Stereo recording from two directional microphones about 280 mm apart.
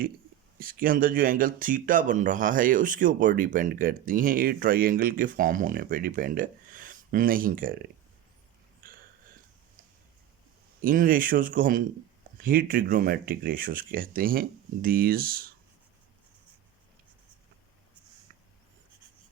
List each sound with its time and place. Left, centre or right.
0.6 s speech: right
8.8 s a sound: right
10.8 s speech: right